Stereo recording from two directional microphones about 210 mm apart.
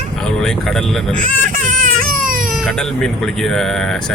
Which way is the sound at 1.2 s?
40° right (ahead or behind).